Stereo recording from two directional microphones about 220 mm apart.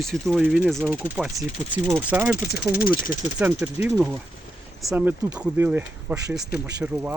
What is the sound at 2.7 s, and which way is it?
Speech, 40° left (ahead or behind).